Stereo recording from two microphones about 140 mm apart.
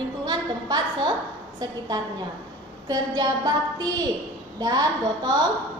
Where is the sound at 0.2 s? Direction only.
30° right (ahead or behind).